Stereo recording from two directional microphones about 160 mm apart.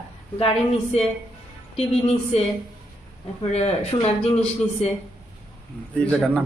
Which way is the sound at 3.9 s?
35° left (ahead or behind).